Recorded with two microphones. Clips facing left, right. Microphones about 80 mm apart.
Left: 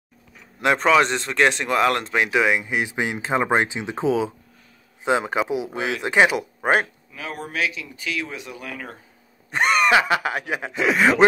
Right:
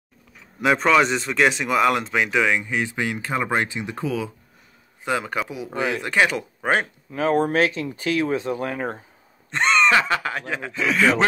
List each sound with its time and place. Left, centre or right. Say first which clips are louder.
0.6 s speech: even; centre
7.1 s speech: right 13 dB; right
9.5 s speech: even; centre